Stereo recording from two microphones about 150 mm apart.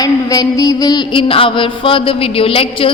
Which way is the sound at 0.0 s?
25° left (ahead or behind).